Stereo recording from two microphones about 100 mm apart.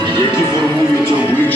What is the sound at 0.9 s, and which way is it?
Speech, 25° left (ahead or behind).